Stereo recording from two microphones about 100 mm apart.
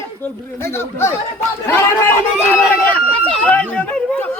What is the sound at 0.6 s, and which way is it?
Speech, 25° left (ahead or behind).